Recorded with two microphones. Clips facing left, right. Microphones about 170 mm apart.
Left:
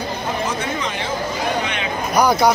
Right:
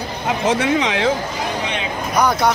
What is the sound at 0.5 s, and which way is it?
Speech, 90° right.